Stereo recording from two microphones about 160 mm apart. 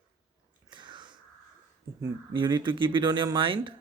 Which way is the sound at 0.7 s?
30° right (ahead or behind).